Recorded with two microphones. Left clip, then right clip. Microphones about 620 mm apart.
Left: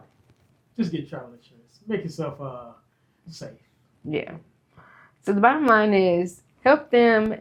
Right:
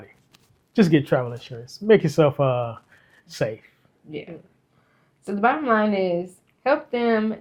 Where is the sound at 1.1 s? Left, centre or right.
Right.